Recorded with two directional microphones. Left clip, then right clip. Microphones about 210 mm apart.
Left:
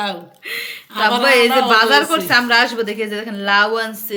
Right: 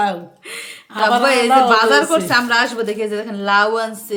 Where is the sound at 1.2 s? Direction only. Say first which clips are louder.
Left 1 dB; 5° left (ahead or behind).